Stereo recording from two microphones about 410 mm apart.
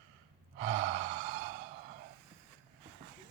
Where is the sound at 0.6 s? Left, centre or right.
Centre.